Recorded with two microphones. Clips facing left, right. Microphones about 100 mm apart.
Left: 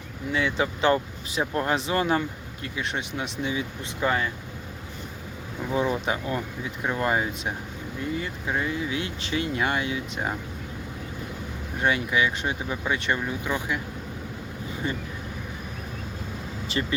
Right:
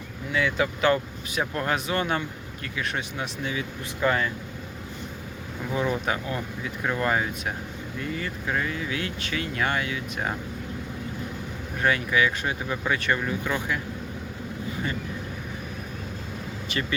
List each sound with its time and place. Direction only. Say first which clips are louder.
0.3 s speech: right 1 dB; 25° left (ahead or behind)
5.7 s speech: left 1 dB; 25° left (ahead or behind)
11.8 s speech: right 1 dB; 20° left (ahead or behind)
16.8 s speech: left 2 dB; 25° left (ahead or behind)